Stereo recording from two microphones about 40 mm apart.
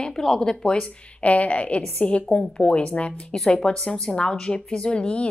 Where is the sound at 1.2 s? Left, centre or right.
Left.